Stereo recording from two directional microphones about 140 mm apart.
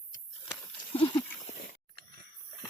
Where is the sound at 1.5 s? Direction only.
90° left.